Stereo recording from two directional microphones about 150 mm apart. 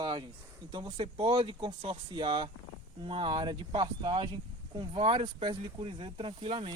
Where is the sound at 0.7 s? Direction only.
30° right (ahead or behind).